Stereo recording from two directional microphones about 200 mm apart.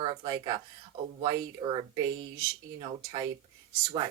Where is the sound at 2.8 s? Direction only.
25° right (ahead or behind).